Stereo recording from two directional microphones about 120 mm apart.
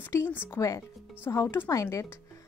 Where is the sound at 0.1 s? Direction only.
20° left (ahead or behind).